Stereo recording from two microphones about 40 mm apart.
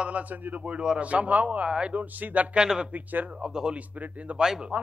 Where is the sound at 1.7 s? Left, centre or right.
Right.